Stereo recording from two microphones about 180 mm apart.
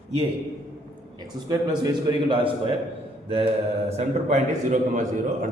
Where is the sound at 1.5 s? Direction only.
25° right (ahead or behind).